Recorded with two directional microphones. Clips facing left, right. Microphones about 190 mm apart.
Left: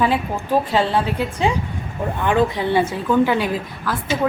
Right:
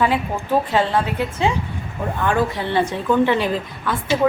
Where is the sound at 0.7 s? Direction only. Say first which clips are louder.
Even; 10° left (ahead or behind).